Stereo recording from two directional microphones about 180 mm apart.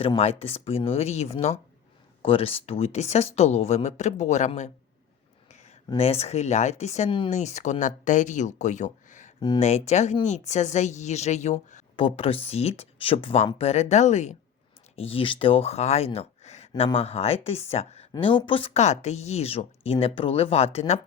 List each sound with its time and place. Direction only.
0.0 s a woman's voice: 35° left (ahead or behind)
5.5 s a sound: 40° left (ahead or behind)
6.0 s a woman's voice: 35° left (ahead or behind)